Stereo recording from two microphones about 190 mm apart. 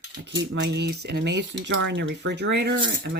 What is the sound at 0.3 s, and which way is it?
Speech, 65° right (ahead or behind).